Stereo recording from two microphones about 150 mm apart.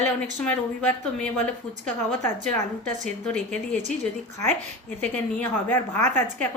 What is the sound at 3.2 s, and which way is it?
Speech, 10° left (ahead or behind).